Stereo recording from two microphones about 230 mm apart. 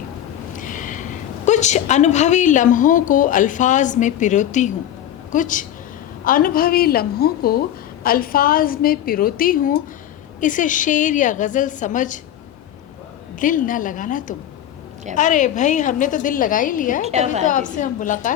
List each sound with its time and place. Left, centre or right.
0.5 s a woman's voice: left
13.4 s a woman's voice: left